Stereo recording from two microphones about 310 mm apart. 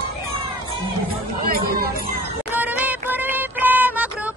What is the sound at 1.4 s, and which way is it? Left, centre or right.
Music, right.